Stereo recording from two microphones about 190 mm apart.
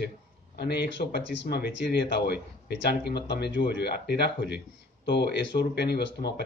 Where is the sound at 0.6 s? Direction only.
60° left (ahead or behind).